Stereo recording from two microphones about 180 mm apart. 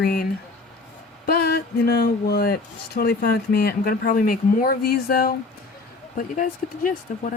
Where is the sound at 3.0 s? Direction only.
60° left (ahead or behind).